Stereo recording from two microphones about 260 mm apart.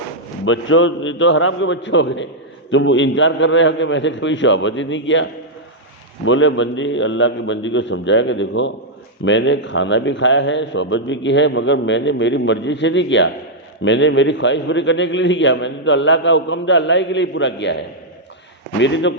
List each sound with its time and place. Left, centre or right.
0.4 s a man's voice: left